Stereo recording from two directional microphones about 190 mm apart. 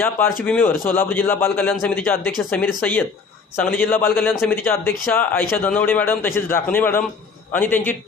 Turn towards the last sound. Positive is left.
turn(degrees=10)  # may be behind; listen again after turning